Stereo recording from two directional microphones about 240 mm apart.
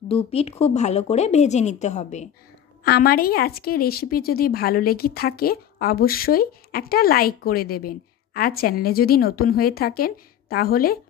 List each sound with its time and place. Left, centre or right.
0.1 s speech: left
2.8 s a woman's voice: left